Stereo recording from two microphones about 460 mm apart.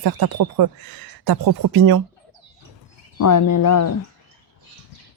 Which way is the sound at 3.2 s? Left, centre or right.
Left.